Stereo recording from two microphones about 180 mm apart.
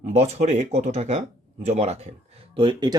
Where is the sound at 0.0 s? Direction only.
40° right (ahead or behind).